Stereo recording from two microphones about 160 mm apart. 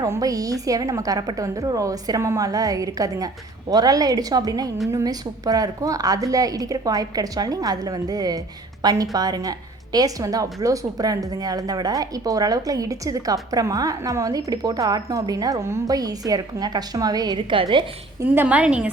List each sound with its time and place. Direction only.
0.0 s a woman's voice: 20° right (ahead or behind)
18.2 s a woman's voice: 10° right (ahead or behind)